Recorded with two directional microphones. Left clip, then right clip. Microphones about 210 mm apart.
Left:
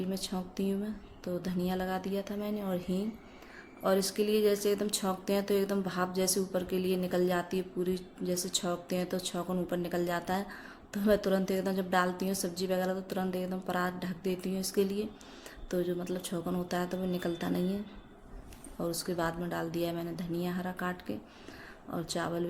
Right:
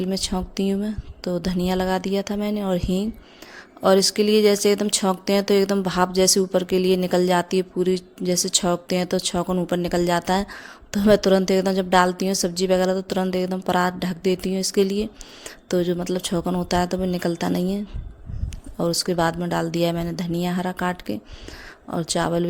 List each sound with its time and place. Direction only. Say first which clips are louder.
0.1 s speech: right 11 dB; 45° right (ahead or behind)
18.8 s speech: right 12 dB; 45° right (ahead or behind)